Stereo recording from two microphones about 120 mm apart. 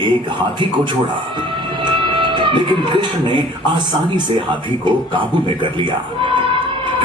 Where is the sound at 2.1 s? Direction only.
40° right (ahead or behind).